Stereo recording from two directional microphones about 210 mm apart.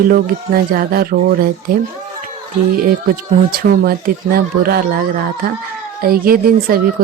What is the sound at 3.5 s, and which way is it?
A woman's voice, 45° right (ahead or behind).